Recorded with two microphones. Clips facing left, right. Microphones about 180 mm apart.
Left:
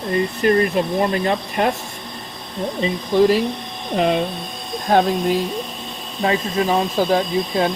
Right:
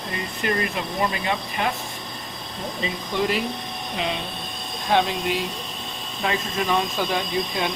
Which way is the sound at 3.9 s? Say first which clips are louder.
Left 11 dB; 50° left (ahead or behind).